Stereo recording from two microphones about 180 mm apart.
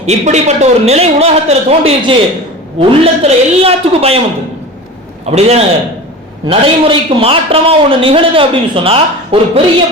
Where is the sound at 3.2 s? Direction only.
35° right (ahead or behind).